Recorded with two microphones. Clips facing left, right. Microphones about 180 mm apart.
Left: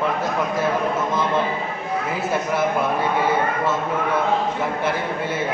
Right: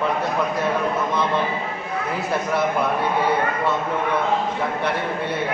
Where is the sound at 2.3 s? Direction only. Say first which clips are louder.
Even; centre (ahead or behind).